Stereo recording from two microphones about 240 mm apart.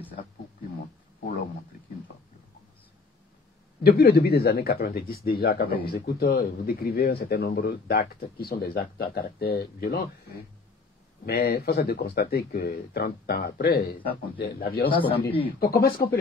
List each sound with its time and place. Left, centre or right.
3.8 s speech: left
11.2 s speech: left
14.9 s speech: left